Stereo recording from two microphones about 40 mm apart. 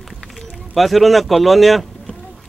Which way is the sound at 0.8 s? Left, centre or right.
Centre.